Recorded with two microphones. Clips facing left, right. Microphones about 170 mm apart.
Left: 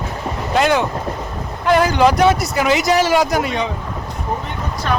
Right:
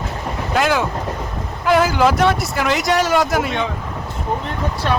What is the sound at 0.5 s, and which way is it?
Speech, centre (ahead or behind).